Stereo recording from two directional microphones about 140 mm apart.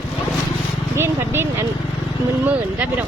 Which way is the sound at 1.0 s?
15° right (ahead or behind).